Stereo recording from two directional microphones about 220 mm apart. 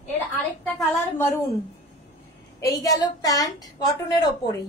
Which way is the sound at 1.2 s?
10° left (ahead or behind).